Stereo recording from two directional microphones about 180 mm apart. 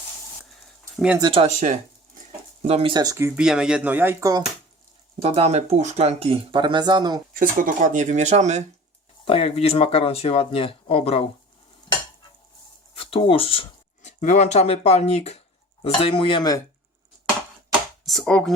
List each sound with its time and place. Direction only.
0.9 s speech: 5° right (ahead or behind)
1.2 s speech: 30° right (ahead or behind)
2.6 s speech: 30° right (ahead or behind)
5.2 s speech: 35° right (ahead or behind)
7.3 s speech: 45° right (ahead or behind)
9.2 s speech: 30° left (ahead or behind)
12.9 s a sound: 30° left (ahead or behind)
14.2 s speech: 40° left (ahead or behind); by 16.6 s 25° left (ahead or behind)
18.0 s speech: centre (ahead or behind)